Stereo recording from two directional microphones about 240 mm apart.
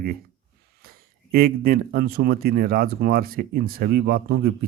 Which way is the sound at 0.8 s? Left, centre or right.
Right.